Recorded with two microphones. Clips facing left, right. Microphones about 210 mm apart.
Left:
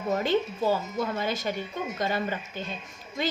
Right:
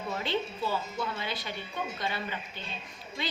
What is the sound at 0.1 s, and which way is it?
A woman's voice, 45° left (ahead or behind).